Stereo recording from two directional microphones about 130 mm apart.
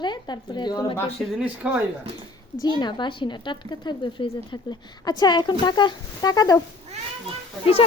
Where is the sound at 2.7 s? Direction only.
35° left (ahead or behind).